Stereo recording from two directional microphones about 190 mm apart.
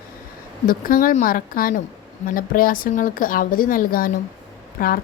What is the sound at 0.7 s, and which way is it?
A woman's voice, 50° left (ahead or behind).